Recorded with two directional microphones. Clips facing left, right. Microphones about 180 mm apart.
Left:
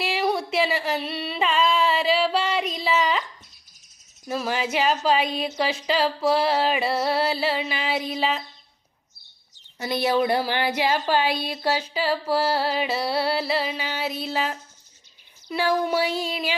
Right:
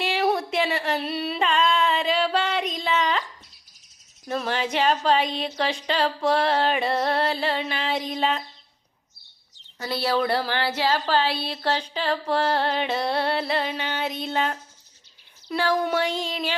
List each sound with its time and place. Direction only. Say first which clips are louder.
0.0 s a sound: right 1 dB; centre (ahead or behind)
4.3 s speech: even; 5° left (ahead or behind)
9.8 s speech: left 2 dB; 15° left (ahead or behind)